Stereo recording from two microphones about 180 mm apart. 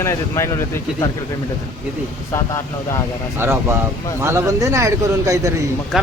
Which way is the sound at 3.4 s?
10° right (ahead or behind).